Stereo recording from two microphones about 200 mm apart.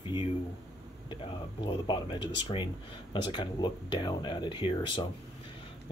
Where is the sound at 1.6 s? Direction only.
25° left (ahead or behind).